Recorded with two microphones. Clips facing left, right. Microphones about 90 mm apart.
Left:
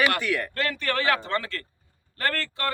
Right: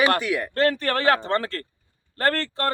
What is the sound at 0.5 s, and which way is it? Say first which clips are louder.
Speech: right 5 dB; 35° right (ahead or behind).